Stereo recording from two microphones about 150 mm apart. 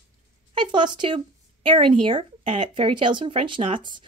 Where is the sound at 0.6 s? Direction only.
30° right (ahead or behind).